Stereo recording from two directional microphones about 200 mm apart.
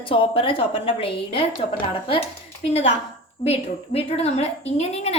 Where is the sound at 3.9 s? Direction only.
30° left (ahead or behind).